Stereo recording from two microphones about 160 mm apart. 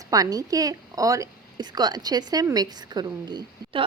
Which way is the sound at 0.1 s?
25° right (ahead or behind).